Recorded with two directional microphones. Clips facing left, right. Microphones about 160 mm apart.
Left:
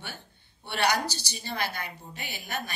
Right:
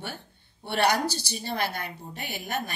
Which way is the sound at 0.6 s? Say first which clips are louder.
Right 3 dB; 50° right (ahead or behind).